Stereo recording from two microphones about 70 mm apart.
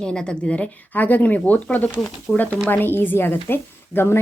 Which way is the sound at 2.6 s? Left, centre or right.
Left.